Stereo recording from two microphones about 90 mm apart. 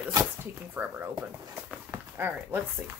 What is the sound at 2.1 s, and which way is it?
Speech, 20° right (ahead or behind).